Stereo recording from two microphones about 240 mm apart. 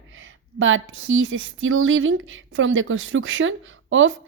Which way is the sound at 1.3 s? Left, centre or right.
Right.